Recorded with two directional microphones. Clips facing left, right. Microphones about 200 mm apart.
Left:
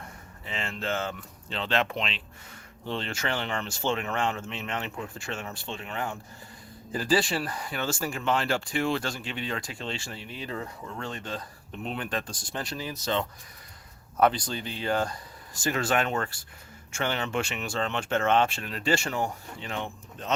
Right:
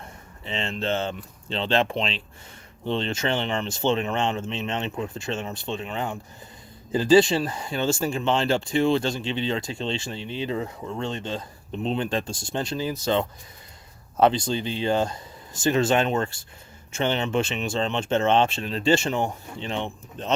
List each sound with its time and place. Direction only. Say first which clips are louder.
0.0 s speech: right 3 dB; 25° right (ahead or behind)